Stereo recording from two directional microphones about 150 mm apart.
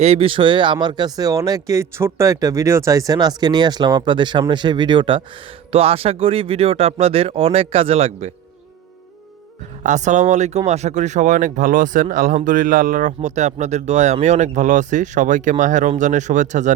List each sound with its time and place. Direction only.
0.0 s speech: 40° right (ahead or behind)
9.8 s speech: 55° right (ahead or behind)